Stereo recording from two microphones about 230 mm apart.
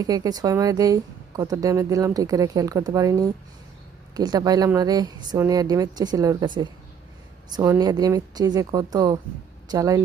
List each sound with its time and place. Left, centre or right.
0.0 s a woman's voice: centre